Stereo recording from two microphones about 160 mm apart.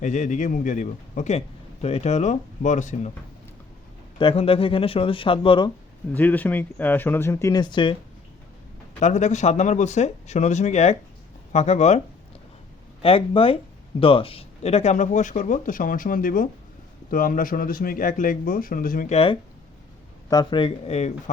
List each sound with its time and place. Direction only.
0.0 s a man's voice: 50° left (ahead or behind)
4.2 s speech: 35° left (ahead or behind)
6.1 s speech: 10° left (ahead or behind); by 7.9 s 30° left (ahead or behind)
9.0 s a man's voice: 50° left (ahead or behind)
13.0 s a man's voice: 35° left (ahead or behind); by 19.1 s 60° left (ahead or behind)
19.1 s speech: 35° left (ahead or behind)